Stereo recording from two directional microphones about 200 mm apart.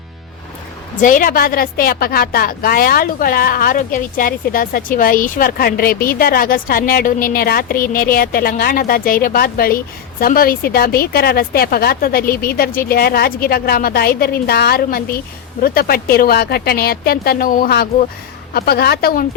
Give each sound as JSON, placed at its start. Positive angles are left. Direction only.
{"t": 1.0, "sound": "a woman's voice", "side_deg": 45}